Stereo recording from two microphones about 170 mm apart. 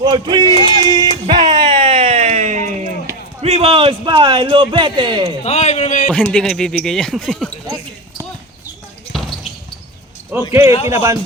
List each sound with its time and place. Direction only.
0.0 s a sound: 25° right (ahead or behind); by 2.8 s 45° right (ahead or behind)
3.4 s speech: 35° right (ahead or behind)
5.4 s a man's voice: 40° left (ahead or behind)
6.3 s speech: 5° left (ahead or behind)
9.1 s basketball bounce: centre (ahead or behind)
10.6 s a man's voice: 35° left (ahead or behind)
10.8 s speech: 15° right (ahead or behind)